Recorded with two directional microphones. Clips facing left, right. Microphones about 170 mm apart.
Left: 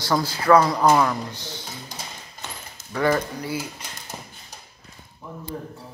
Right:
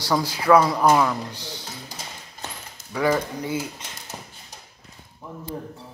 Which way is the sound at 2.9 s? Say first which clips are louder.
Even; 10° right (ahead or behind).